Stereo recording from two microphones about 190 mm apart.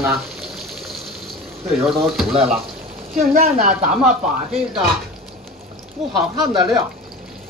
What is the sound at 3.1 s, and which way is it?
Speech, 40° right (ahead or behind).